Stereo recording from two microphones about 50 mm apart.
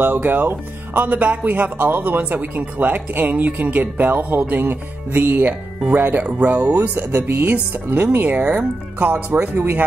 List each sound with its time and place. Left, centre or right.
0.0 s speech: right
7.1 s speech: right
7.4 s speech: right
8.4 s speech: right